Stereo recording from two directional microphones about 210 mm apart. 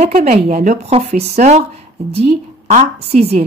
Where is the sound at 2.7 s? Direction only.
30° right (ahead or behind).